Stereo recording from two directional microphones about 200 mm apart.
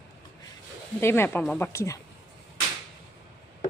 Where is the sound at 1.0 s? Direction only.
10° left (ahead or behind).